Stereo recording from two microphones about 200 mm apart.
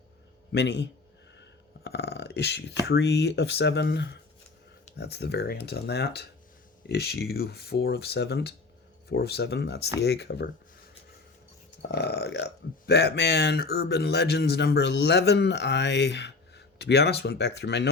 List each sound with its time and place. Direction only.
0.5 s speech: 60° left (ahead or behind)
1.4 s a sound: 55° left (ahead or behind)
2.8 s speech: 55° left (ahead or behind)